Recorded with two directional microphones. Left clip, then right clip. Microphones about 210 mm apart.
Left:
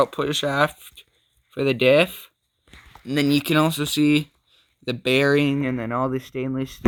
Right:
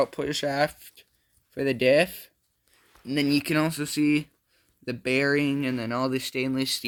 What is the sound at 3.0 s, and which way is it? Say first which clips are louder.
Speech: left 4 dB; 40° left (ahead or behind).